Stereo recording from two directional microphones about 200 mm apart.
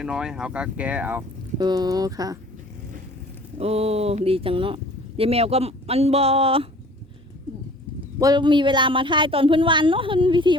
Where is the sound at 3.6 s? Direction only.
30° right (ahead or behind).